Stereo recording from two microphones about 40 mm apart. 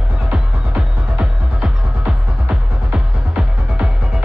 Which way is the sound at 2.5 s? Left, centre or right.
Right.